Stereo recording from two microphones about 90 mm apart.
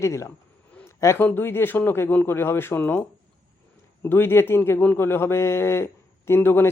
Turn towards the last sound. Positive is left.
turn(degrees=25)  # may be behind; listen again after turning